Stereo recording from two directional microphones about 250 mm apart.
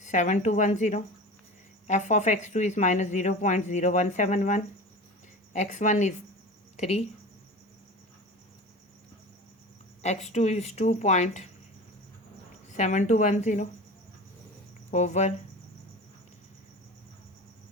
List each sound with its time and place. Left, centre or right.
0.0 s a woman's voice: left
10.0 s a woman's voice: left
12.7 s a woman's voice: left
14.8 s speech: left